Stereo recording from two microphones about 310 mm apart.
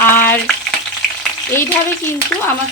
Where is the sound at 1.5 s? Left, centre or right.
Centre.